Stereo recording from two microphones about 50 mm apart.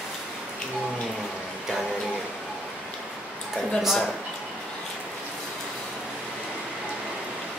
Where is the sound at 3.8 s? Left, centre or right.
Centre.